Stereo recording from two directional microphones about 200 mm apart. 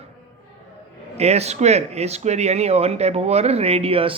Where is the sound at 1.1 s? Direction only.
30° right (ahead or behind).